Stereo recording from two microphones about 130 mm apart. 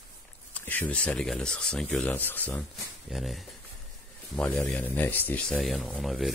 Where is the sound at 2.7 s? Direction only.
Centre (ahead or behind).